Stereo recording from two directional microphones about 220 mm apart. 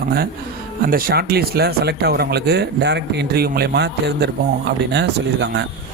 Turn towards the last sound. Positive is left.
turn(degrees=-55)  # may be behind; listen again after turning